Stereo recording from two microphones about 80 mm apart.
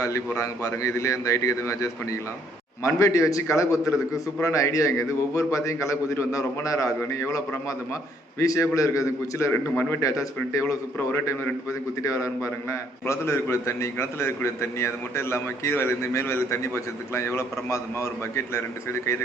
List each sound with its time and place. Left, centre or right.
0.0 s a man's voice: left
9.5 s a man's voice: left
10.5 s a man's voice: left
12.0 s a man's voice: left